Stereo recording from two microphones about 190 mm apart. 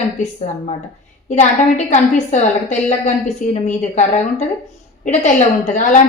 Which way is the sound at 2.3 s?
35° left (ahead or behind).